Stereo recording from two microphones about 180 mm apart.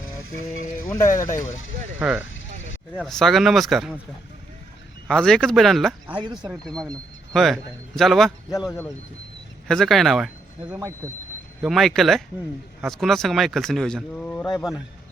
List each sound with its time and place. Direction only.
1.0 s speech: 45° left (ahead or behind)
2.0 s speech: 10° right (ahead or behind)
2.9 s speech: centre (ahead or behind)
5.0 s speech: 5° left (ahead or behind)
6.2 s speech: 25° right (ahead or behind)
6.5 s speech: 5° left (ahead or behind)
9.6 s speech: centre (ahead or behind)
10.8 s speech: 15° right (ahead or behind)
11.6 s speech: centre (ahead or behind)